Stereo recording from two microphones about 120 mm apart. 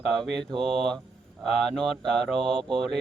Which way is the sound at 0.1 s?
5° left (ahead or behind).